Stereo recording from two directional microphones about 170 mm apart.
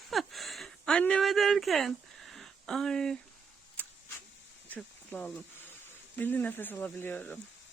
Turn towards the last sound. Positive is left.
turn(degrees=10)  # may be behind; listen again after turning